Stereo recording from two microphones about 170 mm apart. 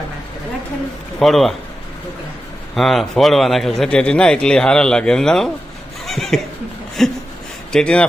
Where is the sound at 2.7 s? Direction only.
Centre (ahead or behind).